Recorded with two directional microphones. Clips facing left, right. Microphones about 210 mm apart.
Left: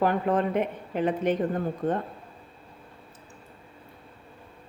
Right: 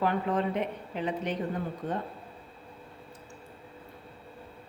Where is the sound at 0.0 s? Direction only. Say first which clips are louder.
Left 4 dB; 50° left (ahead or behind).